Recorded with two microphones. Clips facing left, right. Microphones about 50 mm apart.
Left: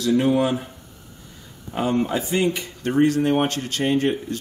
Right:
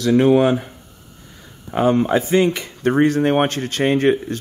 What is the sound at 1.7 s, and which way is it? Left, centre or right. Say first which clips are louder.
Speech: right 6 dB; right.